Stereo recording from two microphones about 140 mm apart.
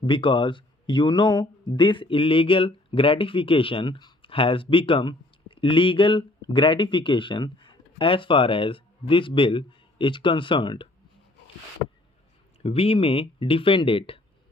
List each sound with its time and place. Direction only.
0.0 s speech: 35° left (ahead or behind)
12.6 s speech: 45° left (ahead or behind)